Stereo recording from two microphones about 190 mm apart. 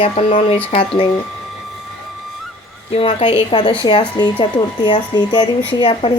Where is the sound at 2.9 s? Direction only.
30° left (ahead or behind).